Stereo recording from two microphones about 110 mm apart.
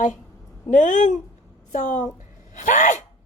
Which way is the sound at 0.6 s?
90° left.